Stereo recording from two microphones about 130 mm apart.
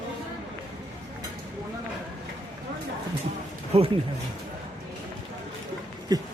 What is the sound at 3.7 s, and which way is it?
Speech, 50° right (ahead or behind).